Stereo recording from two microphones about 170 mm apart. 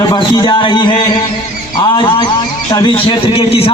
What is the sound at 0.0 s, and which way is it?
A man's voice, 25° left (ahead or behind).